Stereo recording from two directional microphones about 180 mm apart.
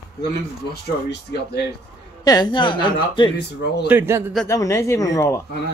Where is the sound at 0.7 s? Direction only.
65° left (ahead or behind).